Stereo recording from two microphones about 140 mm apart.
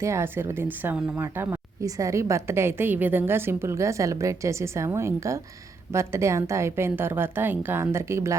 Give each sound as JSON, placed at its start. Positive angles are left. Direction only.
{"t": 0.0, "sound": "speech", "side_deg": -20}